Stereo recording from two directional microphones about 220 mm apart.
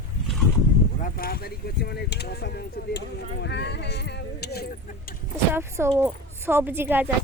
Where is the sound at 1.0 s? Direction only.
40° left (ahead or behind).